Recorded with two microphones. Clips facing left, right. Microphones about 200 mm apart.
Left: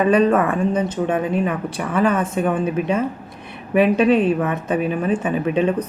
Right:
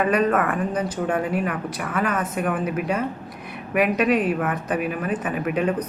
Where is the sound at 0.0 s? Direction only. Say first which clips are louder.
Left 5 dB; 30° left (ahead or behind).